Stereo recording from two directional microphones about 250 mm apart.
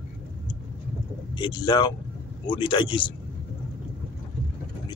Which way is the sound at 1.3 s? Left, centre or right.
Centre.